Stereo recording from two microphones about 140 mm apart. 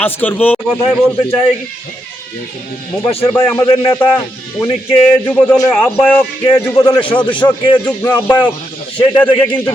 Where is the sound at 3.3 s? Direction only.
20° left (ahead or behind).